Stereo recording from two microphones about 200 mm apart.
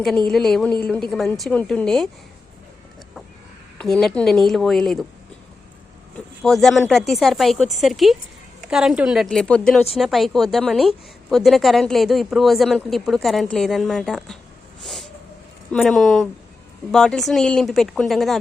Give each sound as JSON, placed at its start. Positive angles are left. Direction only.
{"t": 0.3, "sound": "a woman's voice", "side_deg": 0}
{"t": 3.8, "sound": "a woman's voice", "side_deg": 5}
{"t": 6.4, "sound": "a woman's voice", "side_deg": 0}
{"t": 15.7, "sound": "a woman's voice", "side_deg": 0}